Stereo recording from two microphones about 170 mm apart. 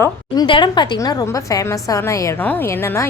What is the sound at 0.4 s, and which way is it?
A woman's voice, 30° left (ahead or behind).